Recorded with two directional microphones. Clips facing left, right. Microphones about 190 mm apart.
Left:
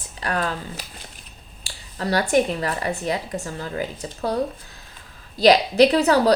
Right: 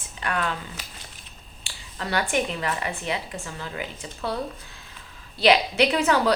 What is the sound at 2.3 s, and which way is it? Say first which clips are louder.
Speech: left 6 dB; 40° left (ahead or behind).